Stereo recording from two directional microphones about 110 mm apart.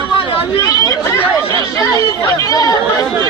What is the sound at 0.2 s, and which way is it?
Chatter, 55° left (ahead or behind).